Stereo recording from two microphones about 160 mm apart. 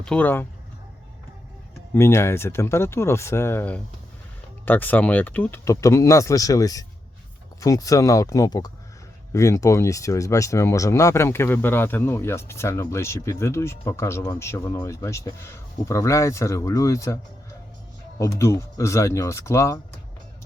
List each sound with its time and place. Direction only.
0.0 s speech: 5° left (ahead or behind)
1.9 s speech: 15° left (ahead or behind)
18.2 s speech: 20° left (ahead or behind)